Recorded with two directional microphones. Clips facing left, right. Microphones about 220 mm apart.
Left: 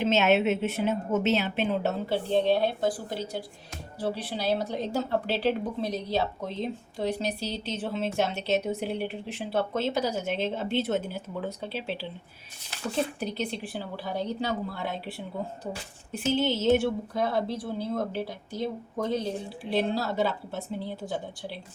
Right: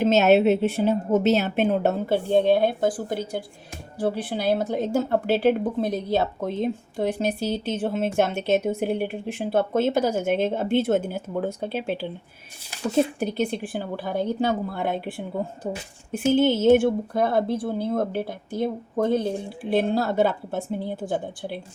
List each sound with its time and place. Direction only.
0.0 s a woman's voice: 40° right (ahead or behind)
13.1 s a woman's voice: 50° right (ahead or behind)